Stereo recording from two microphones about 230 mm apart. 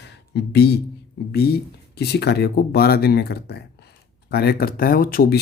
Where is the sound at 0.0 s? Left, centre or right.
Left.